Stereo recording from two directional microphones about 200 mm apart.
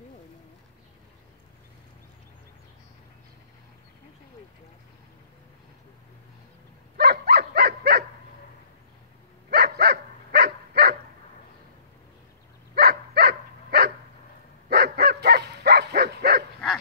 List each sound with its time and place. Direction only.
7.0 s livestock: 55° right (ahead or behind)
9.5 s dog: 55° right (ahead or behind)
12.7 s dog: 50° right (ahead or behind)
14.7 s bow-wow: 55° right (ahead or behind)